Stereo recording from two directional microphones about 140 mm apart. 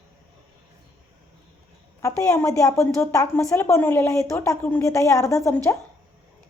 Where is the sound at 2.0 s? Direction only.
20° left (ahead or behind).